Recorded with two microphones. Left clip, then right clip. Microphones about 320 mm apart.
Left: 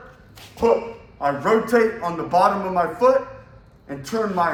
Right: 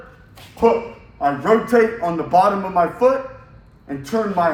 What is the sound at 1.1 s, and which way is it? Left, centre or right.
A man's voice, centre.